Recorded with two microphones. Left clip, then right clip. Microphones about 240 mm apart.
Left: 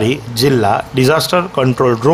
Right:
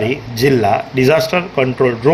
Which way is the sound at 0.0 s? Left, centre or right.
Left.